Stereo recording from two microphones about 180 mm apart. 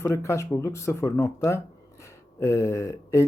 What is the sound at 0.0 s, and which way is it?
Speech, 15° left (ahead or behind).